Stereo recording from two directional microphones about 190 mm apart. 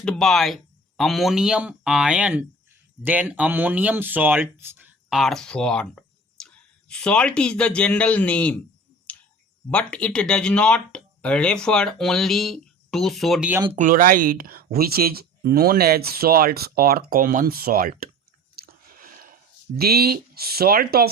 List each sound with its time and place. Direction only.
0.0 s speech: 5° left (ahead or behind)
9.1 s clicking: 5° left (ahead or behind)
9.6 s speech: 5° left (ahead or behind)
13.7 s speech: 45° right (ahead or behind)
18.5 s chewing: 50° right (ahead or behind)
19.8 s speech: 55° right (ahead or behind)